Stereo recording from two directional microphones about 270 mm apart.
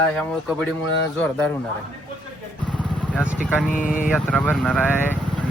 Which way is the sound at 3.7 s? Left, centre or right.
Left.